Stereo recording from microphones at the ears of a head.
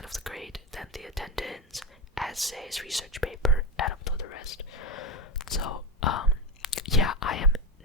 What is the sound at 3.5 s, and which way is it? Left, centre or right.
Whispering, left.